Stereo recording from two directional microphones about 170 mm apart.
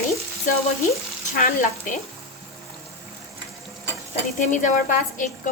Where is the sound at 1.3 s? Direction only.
50° left (ahead or behind).